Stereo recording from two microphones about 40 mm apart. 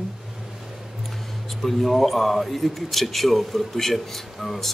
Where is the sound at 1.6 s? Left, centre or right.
Centre.